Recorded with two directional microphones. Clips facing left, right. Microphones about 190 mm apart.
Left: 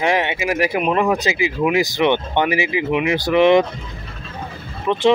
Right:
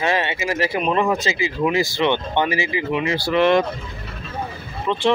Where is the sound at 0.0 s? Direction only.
15° left (ahead or behind).